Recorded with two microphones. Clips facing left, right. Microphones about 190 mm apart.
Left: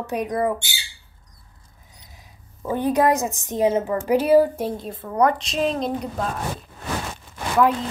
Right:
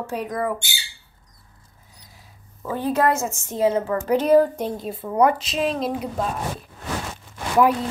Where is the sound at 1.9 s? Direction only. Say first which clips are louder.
Left 1 dB; 20° left (ahead or behind); by 6.1 s 5° right (ahead or behind).